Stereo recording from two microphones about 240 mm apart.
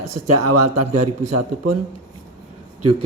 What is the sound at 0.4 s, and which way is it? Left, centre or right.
Speech, right.